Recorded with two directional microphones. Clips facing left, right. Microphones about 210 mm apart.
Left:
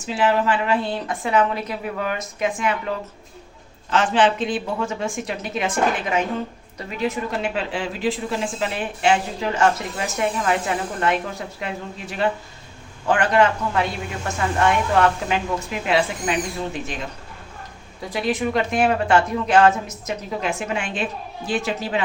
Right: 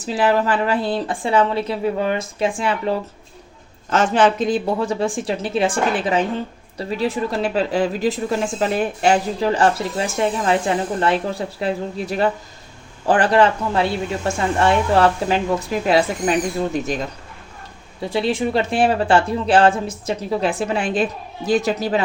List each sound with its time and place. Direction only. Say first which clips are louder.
0.0 s speech: right 2 dB; 35° right (ahead or behind)
3.8 s speech: right 2 dB; 45° right (ahead or behind)
18.1 s speech: right 2 dB; 30° right (ahead or behind)